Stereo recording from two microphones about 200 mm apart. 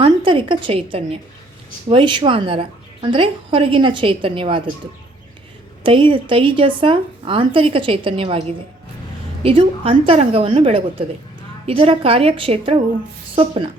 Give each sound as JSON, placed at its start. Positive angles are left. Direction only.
{"t": 0.0, "sound": "a woman's voice", "side_deg": -25}
{"t": 5.8, "sound": "a woman's voice", "side_deg": -25}